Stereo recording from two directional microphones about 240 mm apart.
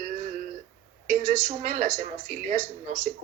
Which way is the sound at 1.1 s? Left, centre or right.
Right.